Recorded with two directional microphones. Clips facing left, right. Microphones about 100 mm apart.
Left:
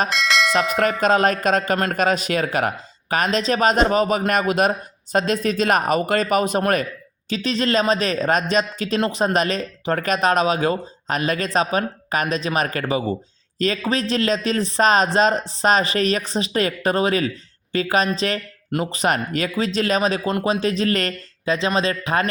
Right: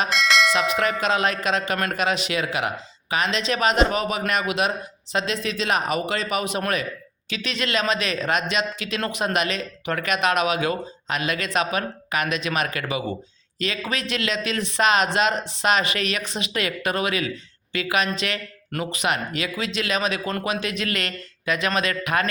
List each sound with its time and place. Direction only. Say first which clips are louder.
0.1 s bell: even; centre (ahead or behind)
1.0 s speech: left 5 dB; 45° left (ahead or behind)